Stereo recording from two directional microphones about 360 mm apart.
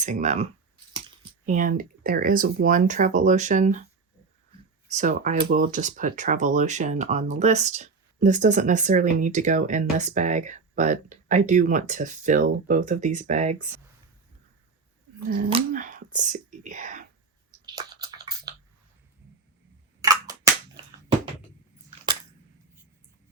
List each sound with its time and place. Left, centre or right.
0.0 s speech: centre
1.5 s speech: right
4.9 s speech: centre
15.3 s speech: centre
17.7 s a sound: centre
20.0 s cap gun: centre
21.8 s camera: centre